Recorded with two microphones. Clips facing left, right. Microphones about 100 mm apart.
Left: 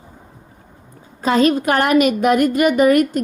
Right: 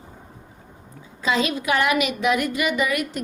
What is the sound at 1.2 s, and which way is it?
A woman's voice, 45° left (ahead or behind).